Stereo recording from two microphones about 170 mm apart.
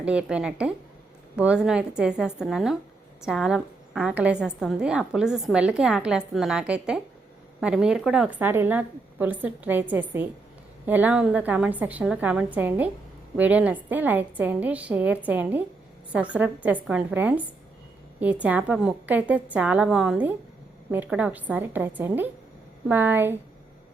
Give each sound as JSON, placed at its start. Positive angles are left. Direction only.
{"t": 0.0, "sound": "a woman's voice", "side_deg": -5}